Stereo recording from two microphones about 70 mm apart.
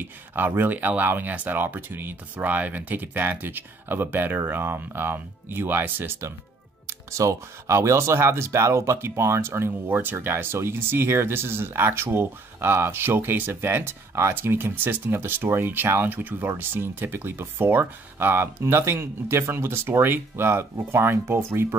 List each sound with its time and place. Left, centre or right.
0.0 s speech: right
6.9 s speech: right